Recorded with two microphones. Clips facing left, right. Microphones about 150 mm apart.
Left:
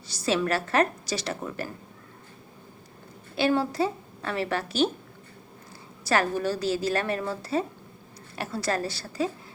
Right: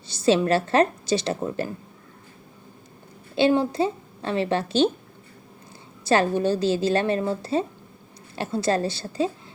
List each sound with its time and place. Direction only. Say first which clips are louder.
0.1 s a woman's voice: right 6 dB; 25° right (ahead or behind)
3.3 s a woman's voice: right 4 dB; 25° right (ahead or behind)
6.1 s a woman's voice: right 5 dB; 25° right (ahead or behind)